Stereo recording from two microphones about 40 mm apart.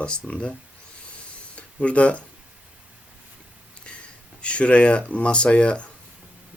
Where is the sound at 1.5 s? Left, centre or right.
Left.